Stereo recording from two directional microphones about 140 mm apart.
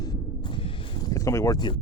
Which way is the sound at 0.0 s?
30° left (ahead or behind).